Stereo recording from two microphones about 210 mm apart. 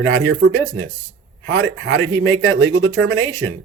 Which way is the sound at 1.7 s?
70° right (ahead or behind).